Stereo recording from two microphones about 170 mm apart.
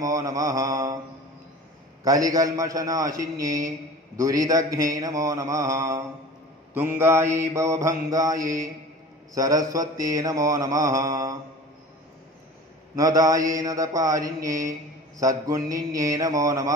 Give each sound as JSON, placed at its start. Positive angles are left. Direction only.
{"t": 0.0, "sound": "mantra", "side_deg": -20}
{"t": 2.0, "sound": "mantra", "side_deg": -20}
{"t": 12.9, "sound": "mantra", "side_deg": -20}